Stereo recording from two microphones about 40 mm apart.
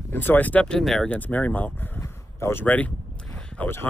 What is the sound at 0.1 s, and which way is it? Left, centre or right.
Speech, left.